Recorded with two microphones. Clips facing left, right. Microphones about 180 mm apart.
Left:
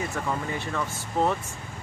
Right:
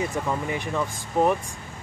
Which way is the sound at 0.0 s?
15° right (ahead or behind).